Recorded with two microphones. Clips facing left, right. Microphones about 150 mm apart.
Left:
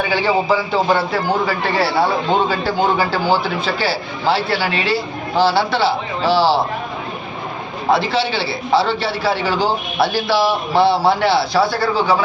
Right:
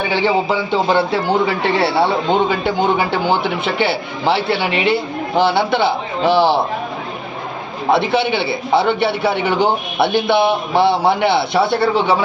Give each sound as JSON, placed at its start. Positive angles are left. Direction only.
{"t": 0.1, "sound": "a man's voice", "side_deg": -25}
{"t": 7.9, "sound": "a man's voice", "side_deg": -20}